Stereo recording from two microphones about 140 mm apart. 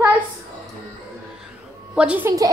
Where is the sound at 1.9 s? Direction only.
10° right (ahead or behind).